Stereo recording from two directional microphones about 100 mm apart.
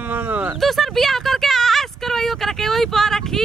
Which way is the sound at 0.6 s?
Centre (ahead or behind).